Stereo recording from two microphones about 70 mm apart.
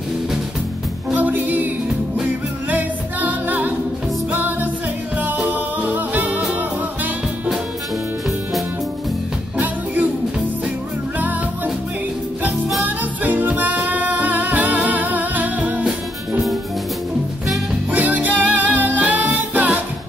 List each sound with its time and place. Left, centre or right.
1.1 s music: right
2.7 s a capella: right
4.3 s music: right
11.1 s music: right
12.8 s music: right
17.9 s music: right